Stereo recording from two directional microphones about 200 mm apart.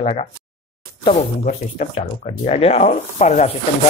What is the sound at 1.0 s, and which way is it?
A man's voice, 40° left (ahead or behind).